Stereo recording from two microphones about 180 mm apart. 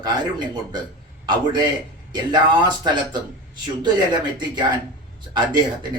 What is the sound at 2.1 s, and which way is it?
Speech, 25° right (ahead or behind).